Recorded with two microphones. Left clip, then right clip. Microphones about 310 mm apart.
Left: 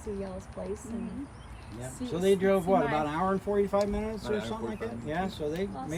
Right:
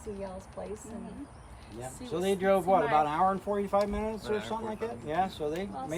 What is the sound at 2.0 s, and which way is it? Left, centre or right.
Speech, centre.